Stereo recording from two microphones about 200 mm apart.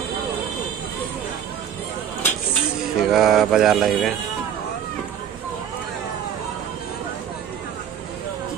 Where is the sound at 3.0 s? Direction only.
Centre (ahead or behind).